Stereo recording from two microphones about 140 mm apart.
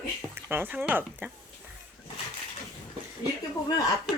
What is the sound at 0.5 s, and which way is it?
Speech, 15° right (ahead or behind).